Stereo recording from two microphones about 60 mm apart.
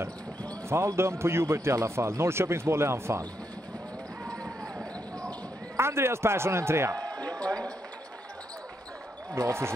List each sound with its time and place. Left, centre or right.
0.7 s a man's voice: right
5.8 s a man's voice: right
7.1 s a sound: left
7.4 s run: centre
9.5 s a man's voice: right